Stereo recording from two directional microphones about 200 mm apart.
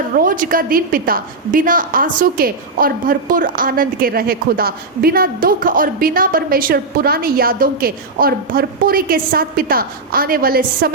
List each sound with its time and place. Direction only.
0.2 s a woman's voice: 45° right (ahead or behind)